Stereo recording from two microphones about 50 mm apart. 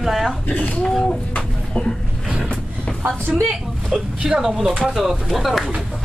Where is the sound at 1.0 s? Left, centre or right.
Left.